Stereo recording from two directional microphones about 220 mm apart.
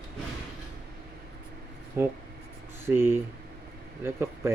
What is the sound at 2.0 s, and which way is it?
Speech, 10° right (ahead or behind).